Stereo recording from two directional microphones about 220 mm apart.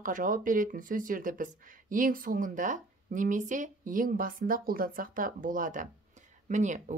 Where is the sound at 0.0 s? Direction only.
40° right (ahead or behind).